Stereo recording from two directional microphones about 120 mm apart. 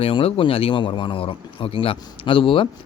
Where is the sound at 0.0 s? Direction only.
50° left (ahead or behind).